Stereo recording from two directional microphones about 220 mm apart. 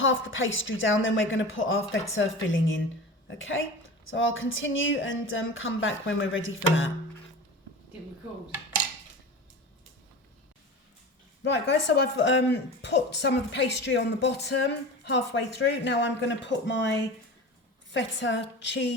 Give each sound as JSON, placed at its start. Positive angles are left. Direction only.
{"t": 0.0, "sound": "a woman's voice", "side_deg": 60}
{"t": 11.4, "sound": "speech", "side_deg": 50}